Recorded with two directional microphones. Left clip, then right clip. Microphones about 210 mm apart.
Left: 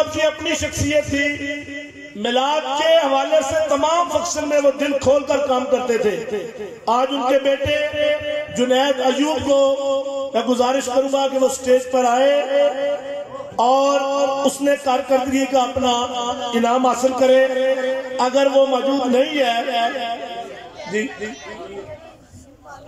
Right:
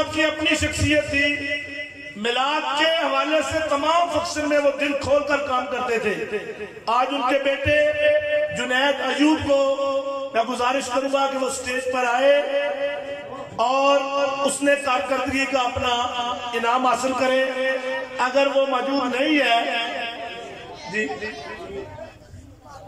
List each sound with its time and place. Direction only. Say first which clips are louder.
0.1 s a man's voice: left 1 dB; 25° left (ahead or behind)